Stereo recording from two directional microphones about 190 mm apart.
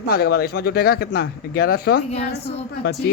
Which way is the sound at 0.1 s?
55° left (ahead or behind).